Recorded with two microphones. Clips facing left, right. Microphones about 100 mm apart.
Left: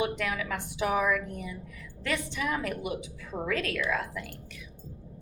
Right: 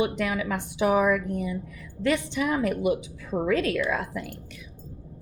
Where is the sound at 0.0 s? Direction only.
20° right (ahead or behind).